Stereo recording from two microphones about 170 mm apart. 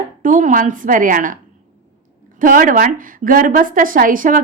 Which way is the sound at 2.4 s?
50° right (ahead or behind).